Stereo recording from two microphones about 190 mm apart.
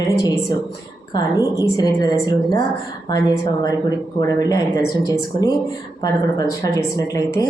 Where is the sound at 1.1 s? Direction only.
20° left (ahead or behind).